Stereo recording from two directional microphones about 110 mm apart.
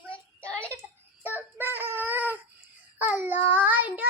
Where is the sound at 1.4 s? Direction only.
15° right (ahead or behind).